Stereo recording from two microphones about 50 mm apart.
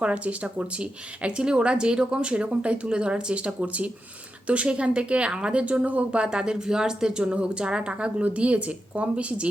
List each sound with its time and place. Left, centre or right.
0.0 s speech: right
6.2 s speech: centre